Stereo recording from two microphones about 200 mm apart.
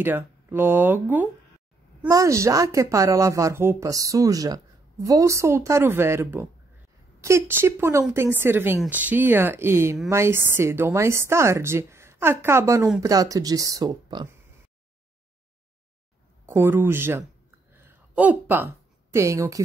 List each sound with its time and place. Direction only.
0.0 s a woman's voice: 10° right (ahead or behind)
16.4 s a woman's voice: 10° right (ahead or behind)
17.7 s a sound: 10° right (ahead or behind)
19.1 s a woman's voice: 15° right (ahead or behind)